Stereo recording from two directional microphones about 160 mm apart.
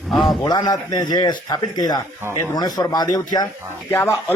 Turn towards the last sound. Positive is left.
turn(degrees=15)  # may be behind; listen again after turning